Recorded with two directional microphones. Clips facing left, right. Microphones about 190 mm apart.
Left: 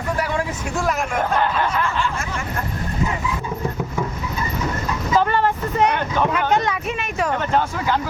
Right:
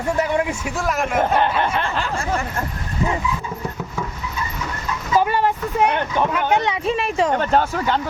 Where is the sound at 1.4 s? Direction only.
25° right (ahead or behind).